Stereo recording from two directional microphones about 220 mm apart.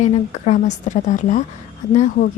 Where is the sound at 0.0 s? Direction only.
30° left (ahead or behind).